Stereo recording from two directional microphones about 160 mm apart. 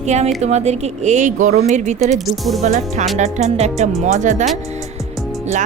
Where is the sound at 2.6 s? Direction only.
50° right (ahead or behind).